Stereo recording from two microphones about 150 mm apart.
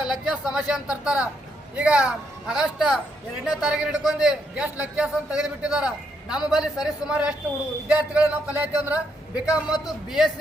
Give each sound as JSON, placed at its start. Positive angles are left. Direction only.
{"t": 0.1, "sound": "a man's voice", "side_deg": 0}